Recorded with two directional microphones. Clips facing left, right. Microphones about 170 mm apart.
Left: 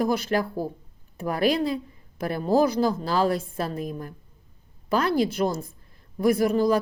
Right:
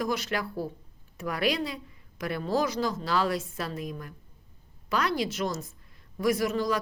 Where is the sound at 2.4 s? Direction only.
45° left (ahead or behind).